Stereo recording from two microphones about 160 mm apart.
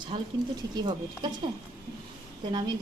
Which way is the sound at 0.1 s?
40° right (ahead or behind).